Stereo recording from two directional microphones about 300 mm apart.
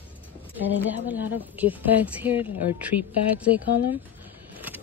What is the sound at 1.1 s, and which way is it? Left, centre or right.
Speech, centre.